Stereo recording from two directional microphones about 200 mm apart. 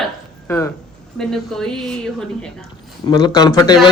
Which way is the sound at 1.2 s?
5° left (ahead or behind).